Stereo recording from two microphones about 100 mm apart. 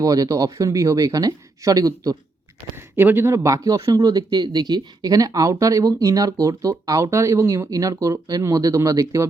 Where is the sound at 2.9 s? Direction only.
20° right (ahead or behind).